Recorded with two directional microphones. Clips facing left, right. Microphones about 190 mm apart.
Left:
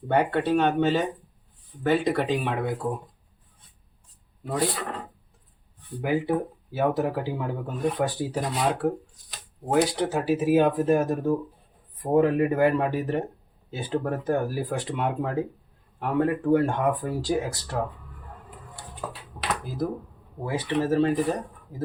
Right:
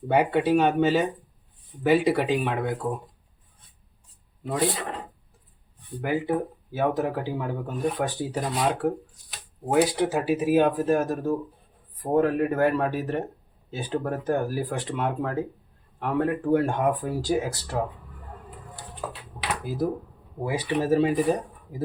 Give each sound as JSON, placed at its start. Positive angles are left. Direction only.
{"t": 0.1, "sound": "speech", "side_deg": -10}
{"t": 4.7, "sound": "speech", "side_deg": -20}
{"t": 6.2, "sound": "speech", "side_deg": 5}
{"t": 12.0, "sound": "speech", "side_deg": 10}
{"t": 19.0, "sound": "speech", "side_deg": -5}